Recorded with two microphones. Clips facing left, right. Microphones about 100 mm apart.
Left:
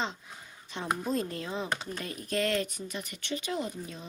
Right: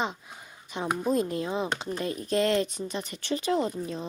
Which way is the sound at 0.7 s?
15° right (ahead or behind).